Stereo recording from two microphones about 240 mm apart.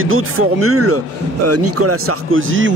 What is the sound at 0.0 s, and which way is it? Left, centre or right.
Speech, right.